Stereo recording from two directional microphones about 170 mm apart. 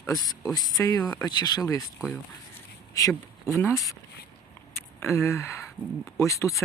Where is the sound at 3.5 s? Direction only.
15° left (ahead or behind).